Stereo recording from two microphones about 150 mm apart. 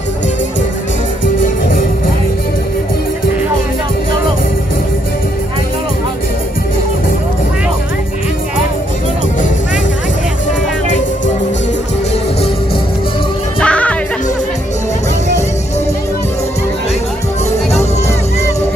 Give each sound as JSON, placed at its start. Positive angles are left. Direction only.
{"t": 1.4, "sound": "music", "side_deg": 65}
{"t": 13.6, "sound": "music", "side_deg": 10}